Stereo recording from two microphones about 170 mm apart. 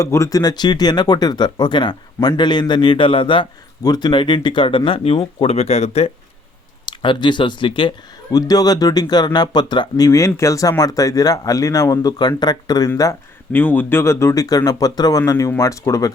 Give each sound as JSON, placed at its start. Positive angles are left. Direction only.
{"t": 0.0, "sound": "speech", "side_deg": 20}
{"t": 6.8, "sound": "speech", "side_deg": 30}